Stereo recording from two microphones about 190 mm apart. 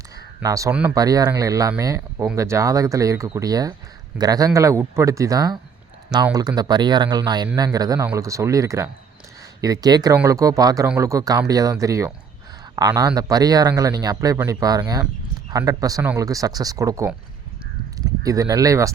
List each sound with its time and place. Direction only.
0.4 s speech: 15° right (ahead or behind)
0.7 s speech: 5° right (ahead or behind)
0.9 s speech: 20° right (ahead or behind)
6.6 s speech: 25° right (ahead or behind)
18.2 s speech: 20° right (ahead or behind)